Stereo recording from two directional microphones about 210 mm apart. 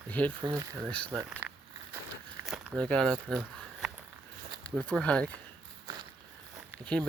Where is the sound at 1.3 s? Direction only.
5° right (ahead or behind).